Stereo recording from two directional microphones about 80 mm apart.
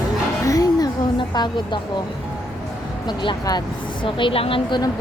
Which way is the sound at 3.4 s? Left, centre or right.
Left.